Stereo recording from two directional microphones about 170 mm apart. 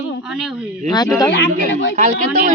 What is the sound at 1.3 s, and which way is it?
Speech, 90° left.